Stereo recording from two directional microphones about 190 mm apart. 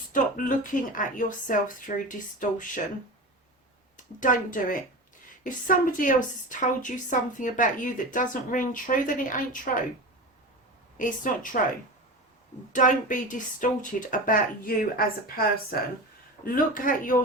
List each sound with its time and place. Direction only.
0.1 s a woman's voice: 45° left (ahead or behind)
3.9 s a woman's voice: 45° left (ahead or behind)
10.9 s a woman's voice: 45° left (ahead or behind)
12.7 s a woman's voice: 45° left (ahead or behind)